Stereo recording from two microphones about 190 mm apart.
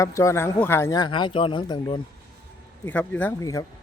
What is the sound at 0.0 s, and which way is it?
Speech, 15° left (ahead or behind).